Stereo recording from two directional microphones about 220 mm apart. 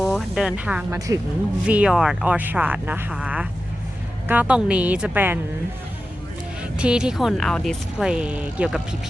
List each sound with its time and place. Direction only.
0.0 s a sound: centre (ahead or behind)
0.9 s speech: 15° right (ahead or behind)
1.6 s speech: 5° right (ahead or behind)
6.6 s speech: 5° right (ahead or behind)